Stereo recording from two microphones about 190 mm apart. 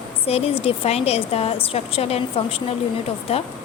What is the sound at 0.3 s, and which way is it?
Speech, 30° left (ahead or behind).